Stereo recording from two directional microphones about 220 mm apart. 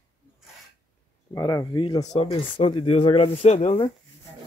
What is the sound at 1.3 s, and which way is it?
Speech, 15° left (ahead or behind).